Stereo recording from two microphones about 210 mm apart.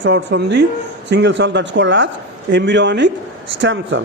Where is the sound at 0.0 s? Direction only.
55° right (ahead or behind).